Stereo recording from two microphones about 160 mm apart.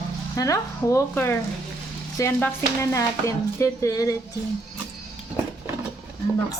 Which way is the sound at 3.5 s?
20° left (ahead or behind).